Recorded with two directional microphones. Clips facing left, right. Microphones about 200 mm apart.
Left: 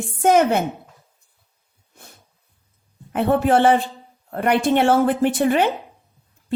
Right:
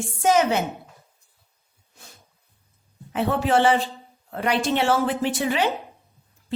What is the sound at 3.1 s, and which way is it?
A woman's voice, 50° left (ahead or behind).